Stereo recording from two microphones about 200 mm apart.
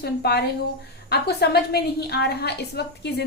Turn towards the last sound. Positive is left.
turn(degrees=55)  # may be behind; listen again after turning